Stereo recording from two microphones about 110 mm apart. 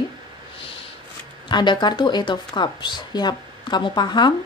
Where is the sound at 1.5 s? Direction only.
45° left (ahead or behind).